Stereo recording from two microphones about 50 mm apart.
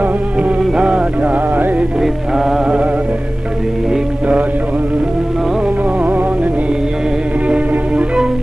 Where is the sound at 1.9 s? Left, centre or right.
Centre.